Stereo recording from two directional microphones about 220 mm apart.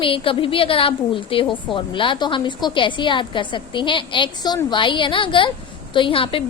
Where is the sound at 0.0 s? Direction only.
25° left (ahead or behind).